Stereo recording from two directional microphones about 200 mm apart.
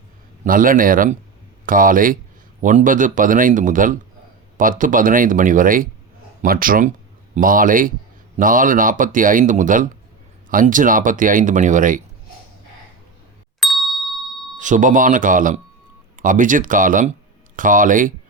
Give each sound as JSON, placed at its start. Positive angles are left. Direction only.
{"t": 0.4, "sound": "speech", "side_deg": -45}
{"t": 13.6, "sound": "ding", "side_deg": 0}
{"t": 14.6, "sound": "speech", "side_deg": -40}